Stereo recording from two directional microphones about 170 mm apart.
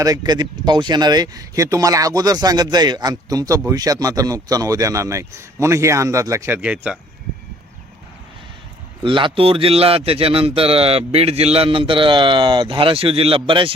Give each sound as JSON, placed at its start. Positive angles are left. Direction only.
{"t": 0.0, "sound": "speech", "side_deg": -20}
{"t": 9.0, "sound": "a man's voice", "side_deg": -30}